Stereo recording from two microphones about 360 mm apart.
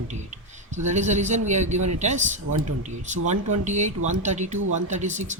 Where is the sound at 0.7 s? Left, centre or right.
Centre.